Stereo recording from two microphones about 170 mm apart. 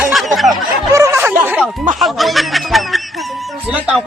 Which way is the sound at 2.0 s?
Centre (ahead or behind).